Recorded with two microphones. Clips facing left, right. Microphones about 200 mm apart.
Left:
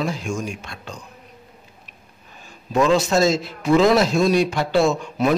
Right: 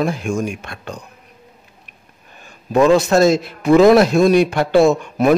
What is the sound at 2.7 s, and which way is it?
Speech, 60° right (ahead or behind).